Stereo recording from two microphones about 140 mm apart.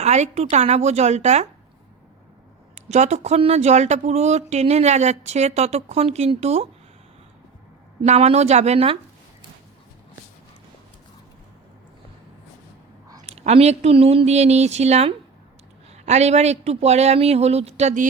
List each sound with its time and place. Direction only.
0.0 s speech: 55° right (ahead or behind)
2.7 s speech: 55° right (ahead or behind)
8.0 s speech: 50° right (ahead or behind)
13.2 s speech: 50° right (ahead or behind)